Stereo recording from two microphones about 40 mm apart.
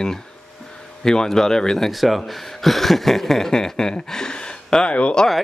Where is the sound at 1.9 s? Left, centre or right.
Centre; by 5.3 s left.